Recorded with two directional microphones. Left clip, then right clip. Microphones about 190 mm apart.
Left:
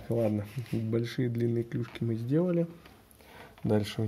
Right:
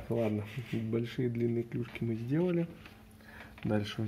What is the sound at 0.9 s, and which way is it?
Speech, 60° left (ahead or behind).